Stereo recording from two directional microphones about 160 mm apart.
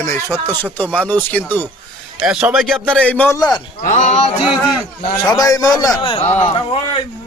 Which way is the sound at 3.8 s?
50° left (ahead or behind).